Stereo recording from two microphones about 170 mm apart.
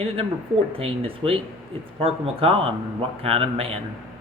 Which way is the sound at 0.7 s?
35° right (ahead or behind).